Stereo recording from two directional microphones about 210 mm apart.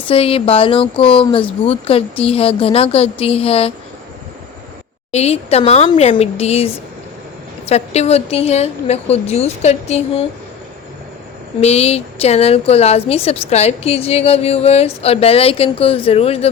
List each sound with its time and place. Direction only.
0.1 s a woman's voice: 25° left (ahead or behind)
5.1 s a woman's voice: 30° left (ahead or behind)
11.6 s a woman's voice: 30° left (ahead or behind)